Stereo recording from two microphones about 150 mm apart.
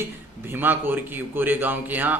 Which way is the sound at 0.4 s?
15° right (ahead or behind).